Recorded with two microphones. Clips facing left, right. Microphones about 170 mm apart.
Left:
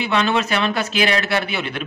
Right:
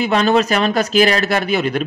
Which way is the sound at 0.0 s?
40° right (ahead or behind).